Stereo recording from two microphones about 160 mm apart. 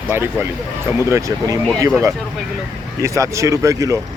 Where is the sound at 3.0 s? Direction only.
20° right (ahead or behind).